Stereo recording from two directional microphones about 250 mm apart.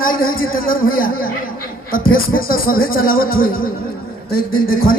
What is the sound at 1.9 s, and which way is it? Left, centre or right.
Speech, left.